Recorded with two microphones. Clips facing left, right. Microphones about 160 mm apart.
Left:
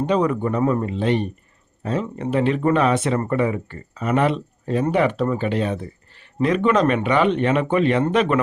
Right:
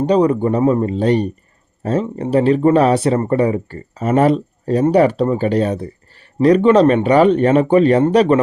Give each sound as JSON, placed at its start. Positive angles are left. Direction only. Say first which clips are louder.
{"t": 0.0, "sound": "speech", "louder": "right 6 dB", "side_deg": -35}